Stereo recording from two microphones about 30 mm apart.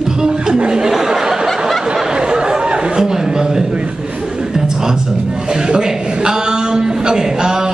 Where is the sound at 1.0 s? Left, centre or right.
Centre.